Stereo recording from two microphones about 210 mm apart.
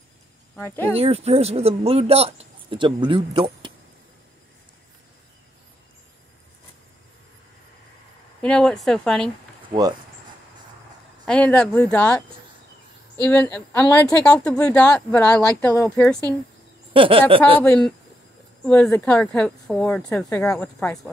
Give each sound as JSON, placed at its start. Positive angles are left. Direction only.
{"t": 0.6, "sound": "a woman's voice", "side_deg": 10}
{"t": 0.9, "sound": "speech", "side_deg": -30}
{"t": 8.4, "sound": "speech", "side_deg": 5}
{"t": 9.7, "sound": "speech", "side_deg": -20}
{"t": 11.2, "sound": "a woman's voice", "side_deg": 5}
{"t": 13.2, "sound": "a woman's voice", "side_deg": 10}
{"t": 16.9, "sound": "speech", "side_deg": -25}
{"t": 17.6, "sound": "speech", "side_deg": 5}